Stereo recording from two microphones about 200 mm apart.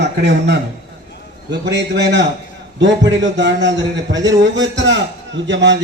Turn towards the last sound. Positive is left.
turn(degrees=-65)  # may be behind; listen again after turning